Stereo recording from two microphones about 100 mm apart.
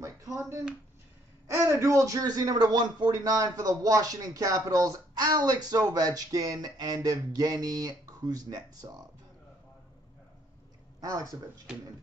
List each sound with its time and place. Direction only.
0.0 s a sound: 35° right (ahead or behind)
1.5 s a man's voice: 30° right (ahead or behind)
11.0 s a man's voice: 35° right (ahead or behind)